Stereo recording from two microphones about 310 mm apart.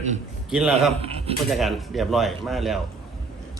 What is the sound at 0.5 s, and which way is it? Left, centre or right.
Speech, centre.